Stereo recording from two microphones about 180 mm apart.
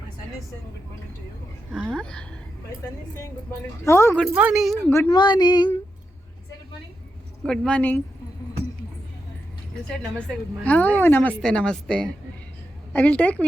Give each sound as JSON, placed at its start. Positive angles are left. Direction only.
{"t": 1.7, "sound": "a woman's voice", "side_deg": 0}
{"t": 3.8, "sound": "a woman's voice", "side_deg": 15}
{"t": 4.2, "sound": "a woman's voice", "side_deg": -5}
{"t": 4.9, "sound": "speech", "side_deg": 15}
{"t": 7.4, "sound": "a woman's voice", "side_deg": 5}
{"t": 9.8, "sound": "a woman's voice", "side_deg": 5}